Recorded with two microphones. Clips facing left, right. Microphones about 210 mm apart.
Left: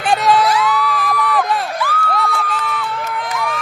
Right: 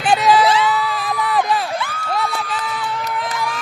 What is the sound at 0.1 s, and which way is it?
Crowd, centre (ahead or behind).